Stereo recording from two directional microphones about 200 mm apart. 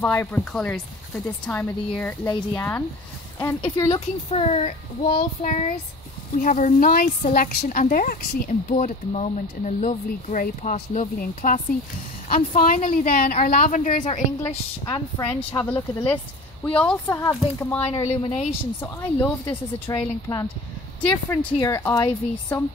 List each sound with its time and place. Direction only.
0.0 s speech: 10° left (ahead or behind)
3.9 s a woman's voice: 30° left (ahead or behind)
14.9 s a woman's voice: 20° left (ahead or behind)
15.6 s speech: 10° left (ahead or behind)
17.8 s a woman's voice: 30° left (ahead or behind)
18.8 s speech: 10° left (ahead or behind)